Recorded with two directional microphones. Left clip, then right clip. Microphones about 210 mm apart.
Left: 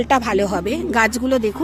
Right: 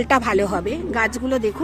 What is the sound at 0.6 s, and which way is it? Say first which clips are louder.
Speech: left 4 dB; 20° left (ahead or behind).